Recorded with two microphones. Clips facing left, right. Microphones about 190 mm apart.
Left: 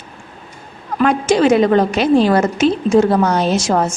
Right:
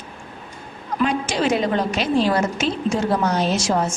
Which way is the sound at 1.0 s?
50° left (ahead or behind).